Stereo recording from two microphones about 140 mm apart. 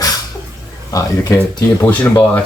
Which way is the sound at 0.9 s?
25° left (ahead or behind).